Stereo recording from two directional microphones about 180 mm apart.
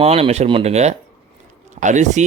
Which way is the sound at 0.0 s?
35° right (ahead or behind).